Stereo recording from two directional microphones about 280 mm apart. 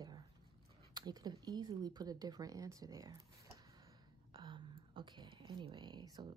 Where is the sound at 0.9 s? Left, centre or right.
Centre.